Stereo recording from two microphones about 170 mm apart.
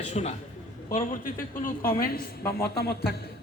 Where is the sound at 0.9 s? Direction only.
50° left (ahead or behind).